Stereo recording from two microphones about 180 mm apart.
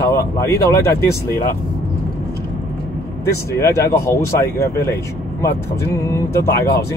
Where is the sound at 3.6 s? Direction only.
15° left (ahead or behind).